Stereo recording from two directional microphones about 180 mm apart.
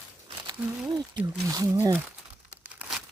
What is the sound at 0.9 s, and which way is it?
Speech, 20° right (ahead or behind).